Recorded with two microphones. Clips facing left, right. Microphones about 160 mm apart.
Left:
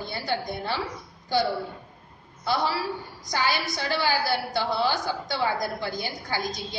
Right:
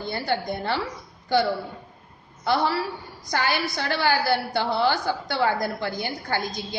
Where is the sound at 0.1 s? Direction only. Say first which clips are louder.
Right 4 dB; 55° right (ahead or behind).